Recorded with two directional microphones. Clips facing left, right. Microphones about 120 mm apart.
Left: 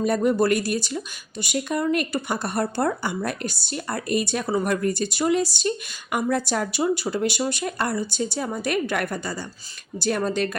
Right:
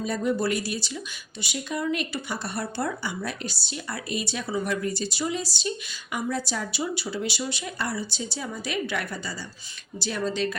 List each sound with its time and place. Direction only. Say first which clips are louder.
0.0 s speech: left 6 dB; 55° left (ahead or behind)